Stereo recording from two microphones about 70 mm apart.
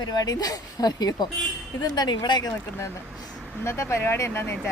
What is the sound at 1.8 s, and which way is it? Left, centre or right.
Speech, left.